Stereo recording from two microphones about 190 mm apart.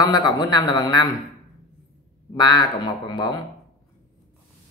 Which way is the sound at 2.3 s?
20° left (ahead or behind).